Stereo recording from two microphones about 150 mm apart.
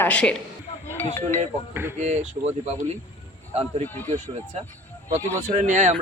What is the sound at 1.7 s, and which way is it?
Speech, 15° right (ahead or behind).